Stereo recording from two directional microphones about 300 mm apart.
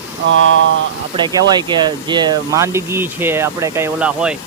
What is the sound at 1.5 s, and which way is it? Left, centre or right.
Speech, centre.